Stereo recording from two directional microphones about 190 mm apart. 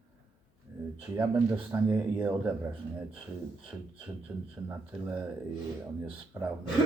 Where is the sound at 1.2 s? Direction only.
10° right (ahead or behind).